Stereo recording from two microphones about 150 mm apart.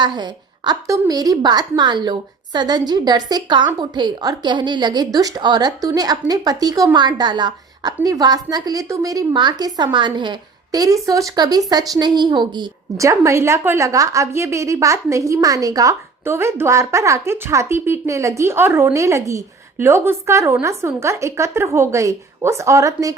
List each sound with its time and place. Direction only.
0.0 s a woman's voice: 30° right (ahead or behind)